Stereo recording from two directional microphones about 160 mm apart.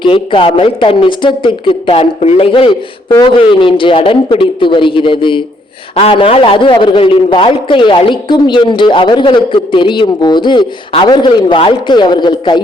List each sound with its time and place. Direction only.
0.0 s a man's voice: 30° left (ahead or behind)